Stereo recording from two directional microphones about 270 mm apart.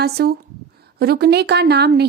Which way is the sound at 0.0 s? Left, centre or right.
Right.